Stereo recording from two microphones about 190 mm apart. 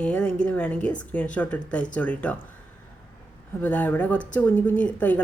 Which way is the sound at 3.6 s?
10° left (ahead or behind).